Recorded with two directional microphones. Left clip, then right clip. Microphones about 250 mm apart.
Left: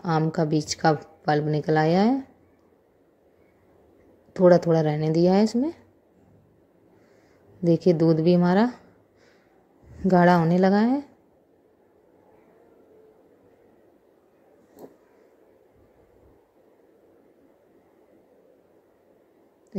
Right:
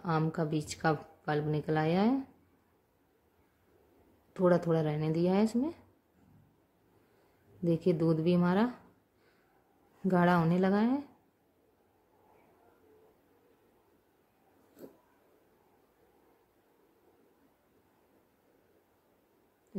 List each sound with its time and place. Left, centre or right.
0.0 s a woman's voice: centre
4.3 s a woman's voice: centre
7.6 s a woman's voice: centre
10.0 s a woman's voice: centre